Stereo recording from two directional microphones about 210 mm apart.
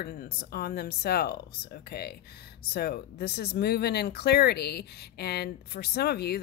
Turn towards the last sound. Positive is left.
turn(degrees=50)  # may be behind; listen again after turning